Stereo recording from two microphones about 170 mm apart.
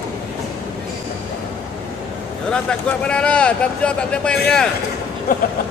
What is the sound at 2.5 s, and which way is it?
Speech, 5° left (ahead or behind).